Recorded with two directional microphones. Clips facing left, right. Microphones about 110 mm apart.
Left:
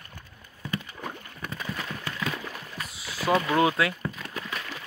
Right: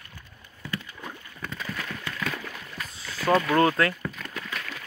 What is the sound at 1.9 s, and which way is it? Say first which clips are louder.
Horse: even; 25° left (ahead or behind).